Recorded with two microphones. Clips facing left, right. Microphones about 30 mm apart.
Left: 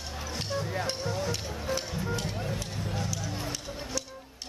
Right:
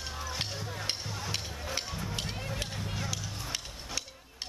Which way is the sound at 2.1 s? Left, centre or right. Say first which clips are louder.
Left 3 dB; centre.